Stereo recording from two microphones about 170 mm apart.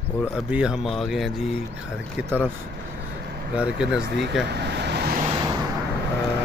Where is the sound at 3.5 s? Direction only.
5° right (ahead or behind).